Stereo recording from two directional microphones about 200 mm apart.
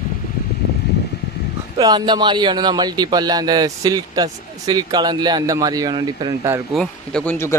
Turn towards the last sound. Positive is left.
turn(degrees=10)  # may be behind; listen again after turning